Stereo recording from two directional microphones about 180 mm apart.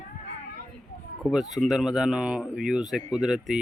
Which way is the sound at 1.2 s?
Centre (ahead or behind).